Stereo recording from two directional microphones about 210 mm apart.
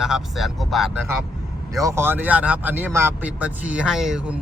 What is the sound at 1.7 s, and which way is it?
Speech, 15° right (ahead or behind).